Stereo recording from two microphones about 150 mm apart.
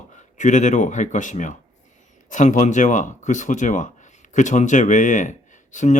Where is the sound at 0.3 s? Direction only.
55° left (ahead or behind).